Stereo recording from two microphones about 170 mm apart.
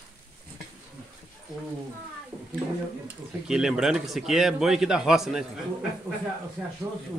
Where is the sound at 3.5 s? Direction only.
5° right (ahead or behind).